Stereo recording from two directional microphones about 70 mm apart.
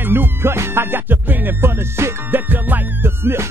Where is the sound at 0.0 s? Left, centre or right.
Right.